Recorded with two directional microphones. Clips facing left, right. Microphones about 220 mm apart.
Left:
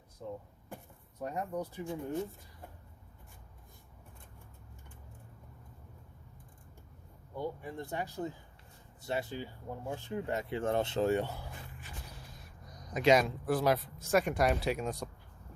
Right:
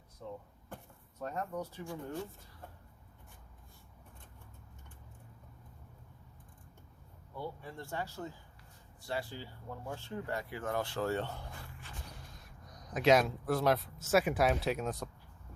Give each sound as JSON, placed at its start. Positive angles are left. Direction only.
{"t": 0.2, "sound": "speech", "side_deg": 10}
{"t": 7.3, "sound": "speech", "side_deg": 15}
{"t": 11.5, "sound": "a sound", "side_deg": 15}
{"t": 12.9, "sound": "speech", "side_deg": 0}